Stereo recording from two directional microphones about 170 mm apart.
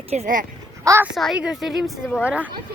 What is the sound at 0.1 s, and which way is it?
Speech, 45° right (ahead or behind).